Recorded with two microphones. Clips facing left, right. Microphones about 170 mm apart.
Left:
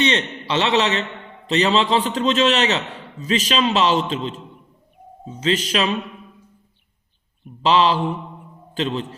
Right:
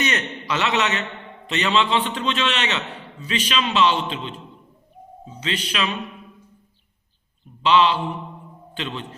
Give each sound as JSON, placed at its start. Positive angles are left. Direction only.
{"t": 0.0, "sound": "a man's voice", "side_deg": 30}
{"t": 5.4, "sound": "a man's voice", "side_deg": 40}
{"t": 7.6, "sound": "a man's voice", "side_deg": 35}